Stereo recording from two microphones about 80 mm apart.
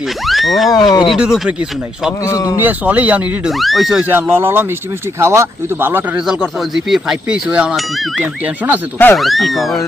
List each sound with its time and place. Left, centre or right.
0.3 s speech: centre
0.7 s speech: left
1.1 s speech: centre
2.2 s speech: left
2.6 s speech: right
3.4 s speech: centre
4.1 s speech: right
6.6 s speech: centre
7.8 s speech: centre
8.2 s speech: centre
9.1 s speech: centre